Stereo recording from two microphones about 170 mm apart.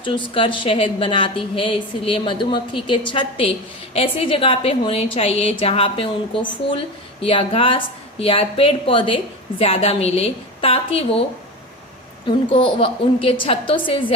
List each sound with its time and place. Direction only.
0.0 s a woman's voice: 30° left (ahead or behind)
12.5 s a woman's voice: 30° left (ahead or behind)